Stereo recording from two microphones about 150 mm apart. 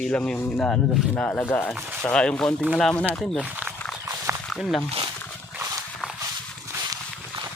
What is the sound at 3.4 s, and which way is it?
Speech, 10° right (ahead or behind).